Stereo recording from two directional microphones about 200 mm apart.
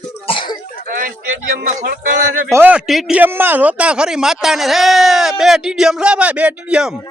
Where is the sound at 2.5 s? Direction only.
10° right (ahead or behind).